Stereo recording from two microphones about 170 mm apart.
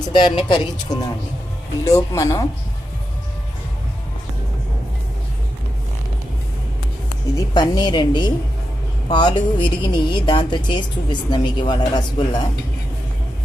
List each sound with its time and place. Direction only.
0.1 s a woman's voice: 25° left (ahead or behind)
1.8 s a woman's voice: 20° left (ahead or behind)
7.3 s a woman's voice: 25° left (ahead or behind)